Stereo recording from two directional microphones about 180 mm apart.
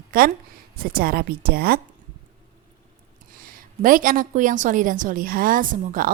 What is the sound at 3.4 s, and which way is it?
A woman's voice, 50° right (ahead or behind).